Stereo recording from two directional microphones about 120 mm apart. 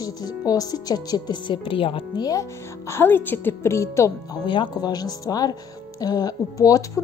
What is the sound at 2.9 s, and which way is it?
A woman's voice, 20° left (ahead or behind).